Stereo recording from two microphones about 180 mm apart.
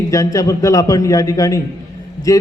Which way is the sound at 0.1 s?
20° left (ahead or behind).